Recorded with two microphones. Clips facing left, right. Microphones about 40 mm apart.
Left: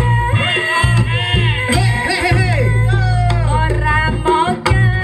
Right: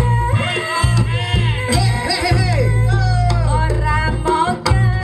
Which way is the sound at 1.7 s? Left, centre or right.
Left.